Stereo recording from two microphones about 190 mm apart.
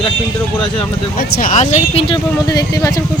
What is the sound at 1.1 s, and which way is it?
Speech, 45° left (ahead or behind).